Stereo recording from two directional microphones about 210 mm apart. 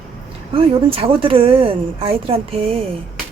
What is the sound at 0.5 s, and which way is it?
A woman's voice, 25° right (ahead or behind).